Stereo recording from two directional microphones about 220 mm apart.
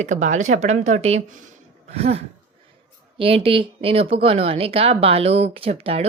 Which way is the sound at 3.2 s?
25° right (ahead or behind).